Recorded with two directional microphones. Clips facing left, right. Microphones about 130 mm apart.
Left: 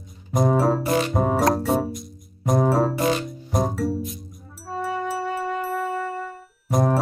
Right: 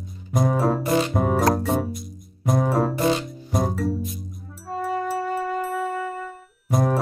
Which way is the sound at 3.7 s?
Centre (ahead or behind).